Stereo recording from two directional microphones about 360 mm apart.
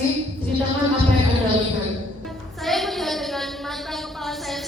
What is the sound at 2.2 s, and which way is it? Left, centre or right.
Music, centre.